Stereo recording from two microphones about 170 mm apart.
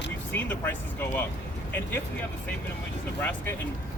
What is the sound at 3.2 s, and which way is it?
Speech, 15° left (ahead or behind).